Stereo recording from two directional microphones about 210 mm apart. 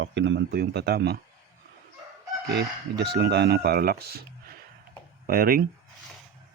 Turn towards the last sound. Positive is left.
turn(degrees=-45)  # may be behind; listen again after turning